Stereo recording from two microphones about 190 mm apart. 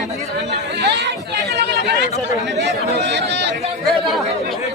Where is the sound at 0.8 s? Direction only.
65° right (ahead or behind).